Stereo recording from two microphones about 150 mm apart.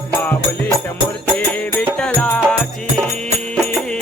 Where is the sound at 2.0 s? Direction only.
5° left (ahead or behind).